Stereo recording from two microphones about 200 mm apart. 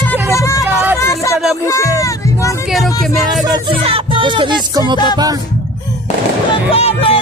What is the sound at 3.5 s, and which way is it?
Music, 25° right (ahead or behind).